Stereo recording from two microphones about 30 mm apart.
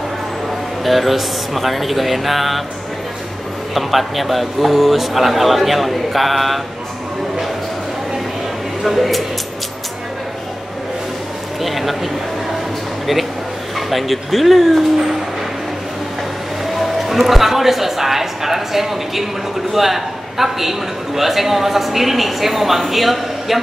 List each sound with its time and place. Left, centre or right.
0.8 s a man's voice: centre
3.7 s a man's voice: centre
8.8 s a man's voice: centre
11.6 s a man's voice: centre
16.6 s a man's voice: centre